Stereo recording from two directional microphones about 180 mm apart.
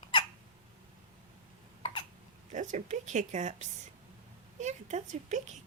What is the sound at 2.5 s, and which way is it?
Speech, 45° right (ahead or behind).